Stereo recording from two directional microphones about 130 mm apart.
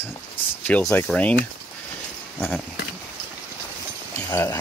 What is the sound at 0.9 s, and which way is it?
Speech, 10° left (ahead or behind).